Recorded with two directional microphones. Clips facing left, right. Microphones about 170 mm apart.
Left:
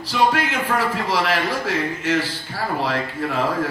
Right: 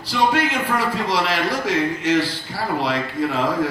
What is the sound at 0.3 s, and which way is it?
A man's voice, 15° right (ahead or behind).